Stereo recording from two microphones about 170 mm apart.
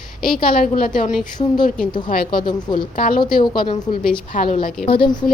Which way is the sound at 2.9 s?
55° left (ahead or behind).